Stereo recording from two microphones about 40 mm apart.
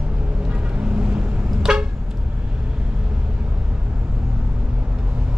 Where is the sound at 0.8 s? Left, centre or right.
Right.